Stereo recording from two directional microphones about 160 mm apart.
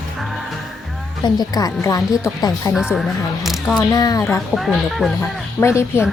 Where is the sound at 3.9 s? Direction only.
25° left (ahead or behind).